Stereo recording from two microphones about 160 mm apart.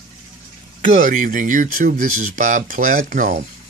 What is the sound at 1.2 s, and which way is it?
Speech, 55° right (ahead or behind).